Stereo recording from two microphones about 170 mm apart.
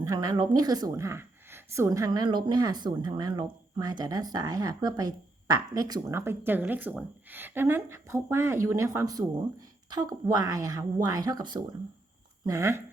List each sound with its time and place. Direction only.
0.0 s a woman's voice: 20° right (ahead or behind)